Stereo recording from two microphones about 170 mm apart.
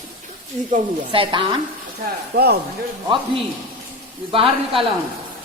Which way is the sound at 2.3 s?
70° right (ahead or behind).